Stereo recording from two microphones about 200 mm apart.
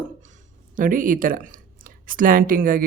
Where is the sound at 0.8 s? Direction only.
40° right (ahead or behind).